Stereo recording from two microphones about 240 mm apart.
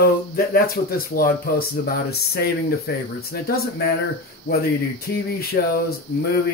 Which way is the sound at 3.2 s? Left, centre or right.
Left.